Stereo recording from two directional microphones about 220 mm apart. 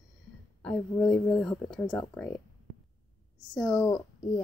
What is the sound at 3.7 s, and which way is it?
Speech, 15° left (ahead or behind).